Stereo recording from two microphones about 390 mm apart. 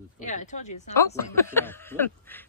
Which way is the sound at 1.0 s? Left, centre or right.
Centre.